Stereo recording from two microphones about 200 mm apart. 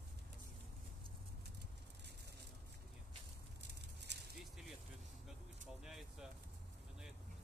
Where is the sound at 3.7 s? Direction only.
55° right (ahead or behind).